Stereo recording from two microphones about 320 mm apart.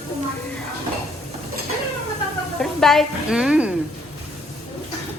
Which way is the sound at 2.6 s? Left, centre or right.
Centre.